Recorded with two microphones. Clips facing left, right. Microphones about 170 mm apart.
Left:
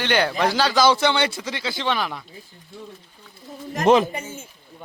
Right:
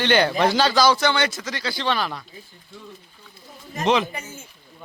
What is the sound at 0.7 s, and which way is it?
Speech, 25° left (ahead or behind).